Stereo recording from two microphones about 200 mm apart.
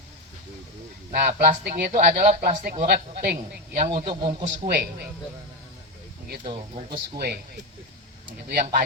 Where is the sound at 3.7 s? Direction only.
40° right (ahead or behind).